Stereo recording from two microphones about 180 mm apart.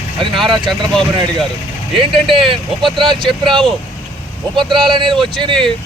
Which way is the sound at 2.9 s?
25° right (ahead or behind).